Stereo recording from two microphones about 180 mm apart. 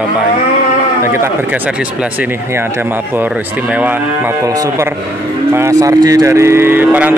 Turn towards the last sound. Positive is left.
turn(degrees=-10)  # may be behind; listen again after turning